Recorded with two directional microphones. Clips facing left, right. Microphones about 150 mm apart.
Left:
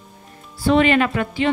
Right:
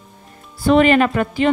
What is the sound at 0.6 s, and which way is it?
Speech, 45° right (ahead or behind).